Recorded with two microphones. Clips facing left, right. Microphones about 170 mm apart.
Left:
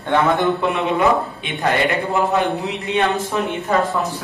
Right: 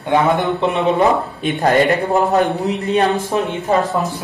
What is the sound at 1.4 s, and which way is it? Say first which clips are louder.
A man's voice: right 5 dB; 40° right (ahead or behind).